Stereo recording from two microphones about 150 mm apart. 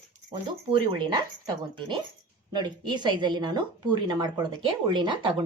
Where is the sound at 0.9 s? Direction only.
35° right (ahead or behind).